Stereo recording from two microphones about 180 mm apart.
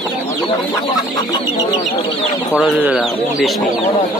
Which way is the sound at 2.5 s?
5° right (ahead or behind).